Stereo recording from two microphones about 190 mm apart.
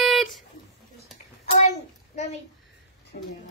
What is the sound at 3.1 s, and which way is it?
Speech, 50° left (ahead or behind).